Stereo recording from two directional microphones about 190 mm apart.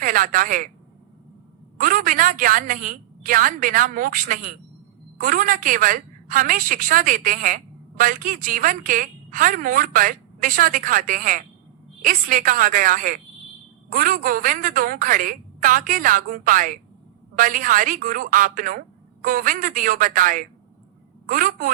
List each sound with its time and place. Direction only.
0.0 s speech: 45° right (ahead or behind)
1.8 s a woman's voice: 45° right (ahead or behind)